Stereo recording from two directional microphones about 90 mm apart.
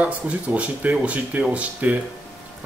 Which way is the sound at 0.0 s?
15° right (ahead or behind).